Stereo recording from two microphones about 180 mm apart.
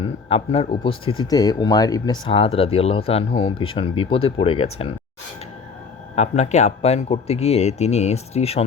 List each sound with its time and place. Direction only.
0.0 s speech: 30° left (ahead or behind)
6.1 s speech: 40° left (ahead or behind)